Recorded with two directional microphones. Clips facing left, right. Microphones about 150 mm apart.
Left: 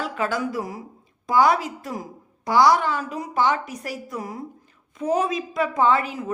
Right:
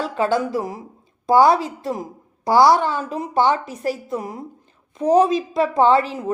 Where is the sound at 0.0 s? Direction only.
30° right (ahead or behind).